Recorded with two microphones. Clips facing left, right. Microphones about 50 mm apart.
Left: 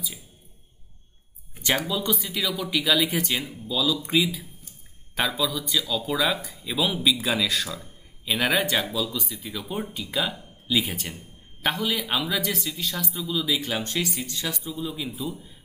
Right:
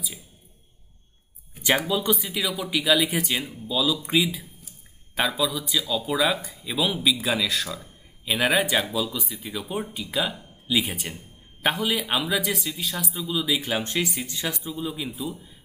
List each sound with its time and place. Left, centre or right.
1.6 s speech: centre